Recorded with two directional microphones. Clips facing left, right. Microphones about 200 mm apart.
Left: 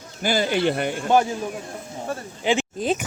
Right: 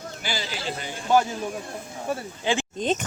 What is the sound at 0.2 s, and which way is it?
Speech, 50° left (ahead or behind).